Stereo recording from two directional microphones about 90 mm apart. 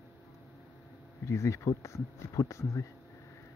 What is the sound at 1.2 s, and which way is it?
Speech, 30° left (ahead or behind).